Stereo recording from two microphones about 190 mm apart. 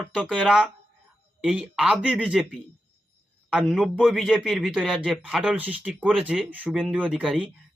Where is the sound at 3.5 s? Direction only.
5° right (ahead or behind).